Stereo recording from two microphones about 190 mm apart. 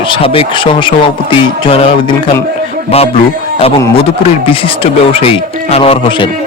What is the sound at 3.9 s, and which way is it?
A man's voice, 30° left (ahead or behind).